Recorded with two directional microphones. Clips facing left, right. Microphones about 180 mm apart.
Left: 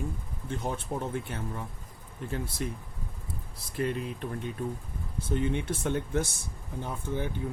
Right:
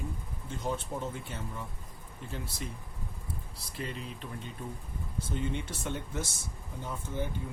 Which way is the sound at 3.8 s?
55° left (ahead or behind).